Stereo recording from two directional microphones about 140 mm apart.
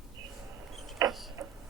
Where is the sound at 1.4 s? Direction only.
25° right (ahead or behind).